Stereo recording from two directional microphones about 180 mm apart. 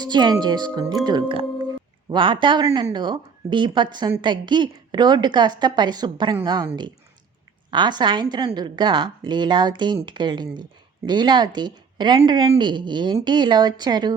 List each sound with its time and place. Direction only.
0.0 s a woman's voice: 25° right (ahead or behind)